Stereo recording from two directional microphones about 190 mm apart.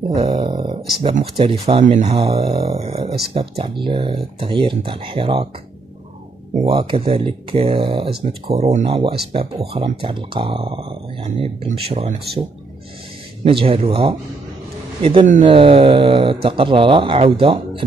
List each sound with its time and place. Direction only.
0.2 s speech: 25° right (ahead or behind)
6.5 s speech: 30° right (ahead or behind)
13.4 s speech: 30° right (ahead or behind)